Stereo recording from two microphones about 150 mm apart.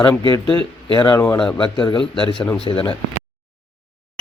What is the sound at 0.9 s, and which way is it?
Speech, 30° left (ahead or behind).